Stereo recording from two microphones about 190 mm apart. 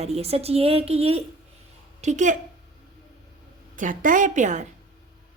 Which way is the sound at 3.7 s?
45° right (ahead or behind).